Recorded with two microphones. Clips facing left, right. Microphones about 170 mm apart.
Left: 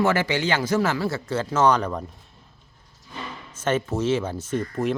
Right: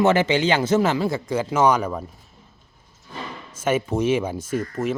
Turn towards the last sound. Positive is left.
turn(degrees=-5)  # may be behind; listen again after turning